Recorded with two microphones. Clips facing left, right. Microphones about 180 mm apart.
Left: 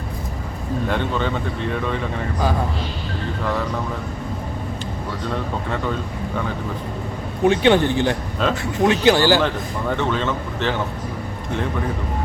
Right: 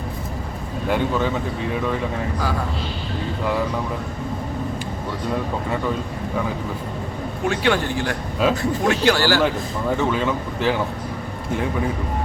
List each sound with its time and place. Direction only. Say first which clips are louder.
0.9 s speech: right 3 dB; 10° right (ahead or behind)
7.4 s a man's voice: left 6 dB; 20° left (ahead or behind)
8.4 s speech: right 2 dB; 10° right (ahead or behind)
8.9 s a man's voice: left 3 dB; 20° left (ahead or behind)
9.9 s speech: right 1 dB; 10° right (ahead or behind)